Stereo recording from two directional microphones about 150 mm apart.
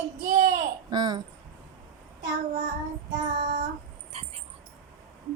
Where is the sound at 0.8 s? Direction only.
30° right (ahead or behind).